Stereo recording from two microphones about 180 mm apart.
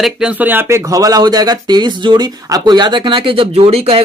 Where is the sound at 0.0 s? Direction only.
5° right (ahead or behind).